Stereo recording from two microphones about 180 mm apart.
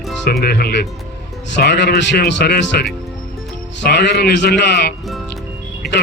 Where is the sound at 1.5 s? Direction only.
75° left (ahead or behind).